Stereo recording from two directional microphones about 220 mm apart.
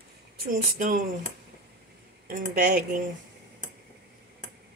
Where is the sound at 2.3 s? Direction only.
40° right (ahead or behind).